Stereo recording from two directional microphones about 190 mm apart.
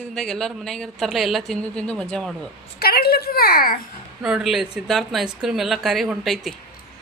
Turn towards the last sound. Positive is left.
turn(degrees=0)  # may be behind; listen again after turning